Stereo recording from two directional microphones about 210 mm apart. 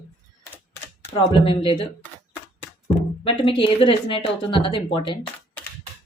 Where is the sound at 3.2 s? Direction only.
25° left (ahead or behind).